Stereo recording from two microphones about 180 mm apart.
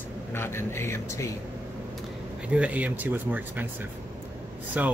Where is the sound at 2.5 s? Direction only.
5° right (ahead or behind).